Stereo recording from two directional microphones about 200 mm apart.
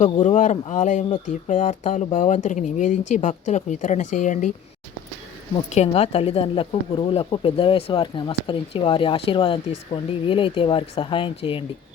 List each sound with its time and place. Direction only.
0.0 s a woman's voice: 35° left (ahead or behind)
5.7 s speech: 30° left (ahead or behind)